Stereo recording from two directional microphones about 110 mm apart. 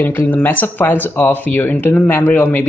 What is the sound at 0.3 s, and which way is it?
Speech, 15° left (ahead or behind).